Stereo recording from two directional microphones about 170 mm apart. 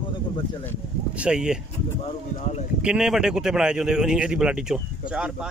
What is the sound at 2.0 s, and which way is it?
Speech, 40° left (ahead or behind).